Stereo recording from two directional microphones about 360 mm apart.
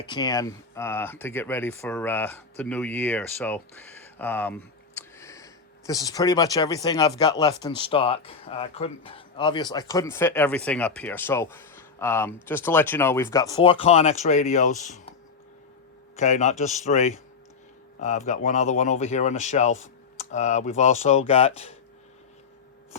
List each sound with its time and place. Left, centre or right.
0.0 s speech: centre
16.1 s speech: centre